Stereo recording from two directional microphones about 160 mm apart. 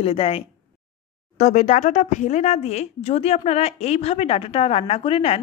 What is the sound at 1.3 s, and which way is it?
Speech, 50° left (ahead or behind).